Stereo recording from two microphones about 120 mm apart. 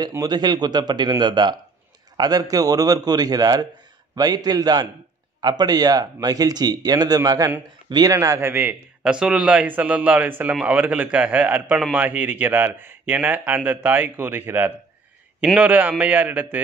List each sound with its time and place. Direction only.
0.1 s a man's voice: 35° right (ahead or behind); by 16.6 s 15° right (ahead or behind)